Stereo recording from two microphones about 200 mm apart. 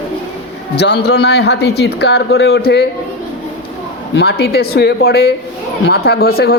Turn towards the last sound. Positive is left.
turn(degrees=50)  # may be behind; listen again after turning